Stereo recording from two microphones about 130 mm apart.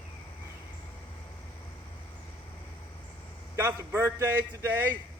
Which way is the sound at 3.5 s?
20° right (ahead or behind).